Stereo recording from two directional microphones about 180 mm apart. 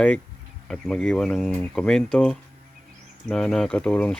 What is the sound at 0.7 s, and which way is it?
Speech, 5° left (ahead or behind).